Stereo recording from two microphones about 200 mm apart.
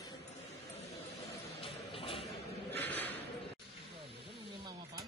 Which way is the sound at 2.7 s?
10° left (ahead or behind).